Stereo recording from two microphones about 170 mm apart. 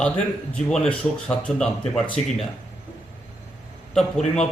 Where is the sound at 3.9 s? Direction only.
5° left (ahead or behind).